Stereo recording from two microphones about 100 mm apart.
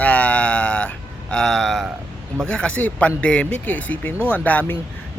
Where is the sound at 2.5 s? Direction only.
10° left (ahead or behind).